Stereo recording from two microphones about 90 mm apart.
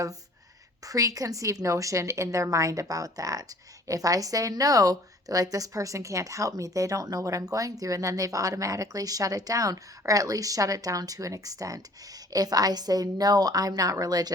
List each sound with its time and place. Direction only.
0.9 s a woman's voice: 40° right (ahead or behind)